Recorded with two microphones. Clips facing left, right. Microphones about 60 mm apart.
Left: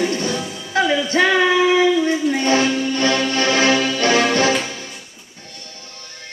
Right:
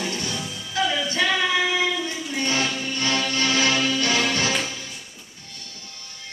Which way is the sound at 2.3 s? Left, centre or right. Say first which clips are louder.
Left 8 dB; left.